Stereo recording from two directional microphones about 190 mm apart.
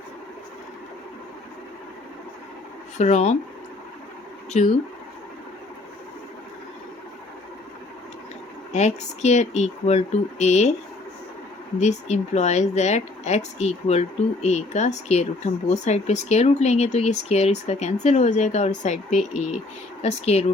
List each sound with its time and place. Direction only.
3.0 s speech: 35° left (ahead or behind)
4.5 s speech: 40° left (ahead or behind)
8.7 s speech: 35° left (ahead or behind)
11.8 s speech: 35° left (ahead or behind)